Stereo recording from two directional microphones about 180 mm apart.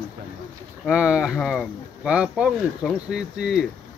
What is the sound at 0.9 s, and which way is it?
Speech, 5° right (ahead or behind).